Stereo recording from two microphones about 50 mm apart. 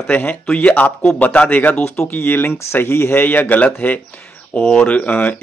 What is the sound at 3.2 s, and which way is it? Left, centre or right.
Speech, left.